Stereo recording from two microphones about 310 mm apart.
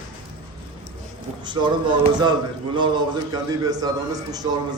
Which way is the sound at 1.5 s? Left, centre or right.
Centre.